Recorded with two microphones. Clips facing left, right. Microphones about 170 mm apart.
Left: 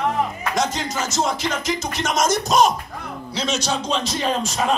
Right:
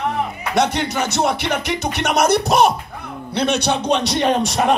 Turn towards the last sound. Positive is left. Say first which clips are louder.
# right 5 dB
turn(degrees=-70)  # may be behind; listen again after turning